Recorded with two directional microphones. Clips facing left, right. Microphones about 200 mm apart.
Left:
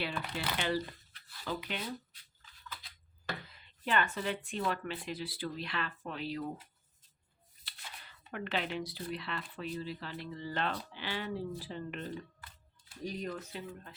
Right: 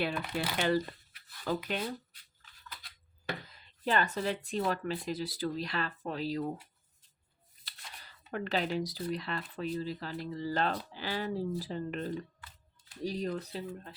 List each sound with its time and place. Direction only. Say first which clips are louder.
0.0 s speech: right 4 dB; 45° right (ahead or behind)
3.4 s speech: right 5 dB; 40° right (ahead or behind)
7.6 s speech: even; 40° right (ahead or behind)